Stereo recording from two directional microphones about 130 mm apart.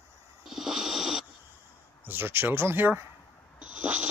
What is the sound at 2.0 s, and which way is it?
Speech, 15° right (ahead or behind).